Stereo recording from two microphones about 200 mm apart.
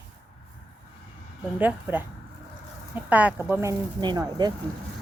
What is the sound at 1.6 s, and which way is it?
A woman's voice, 10° right (ahead or behind).